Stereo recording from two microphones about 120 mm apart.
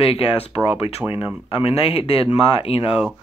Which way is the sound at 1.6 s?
55° left (ahead or behind).